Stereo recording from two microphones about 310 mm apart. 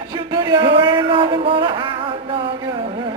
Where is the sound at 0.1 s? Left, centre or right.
Centre.